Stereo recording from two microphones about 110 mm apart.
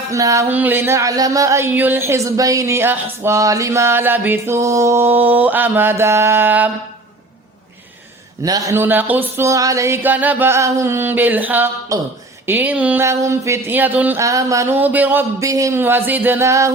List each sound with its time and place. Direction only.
0.1 s speech: 30° right (ahead or behind)
0.4 s speech: 15° right (ahead or behind)
8.4 s speech: 30° right (ahead or behind)
8.7 s speech: 20° right (ahead or behind)
11.9 s speech: 30° right (ahead or behind)
12.5 s speech: 15° right (ahead or behind)
13.1 s speech: 25° right (ahead or behind)
14.2 s speech: 30° right (ahead or behind)
14.8 s speech: 15° right (ahead or behind)
15.4 s speech: 30° right (ahead or behind)
15.8 s speech: 20° right (ahead or behind)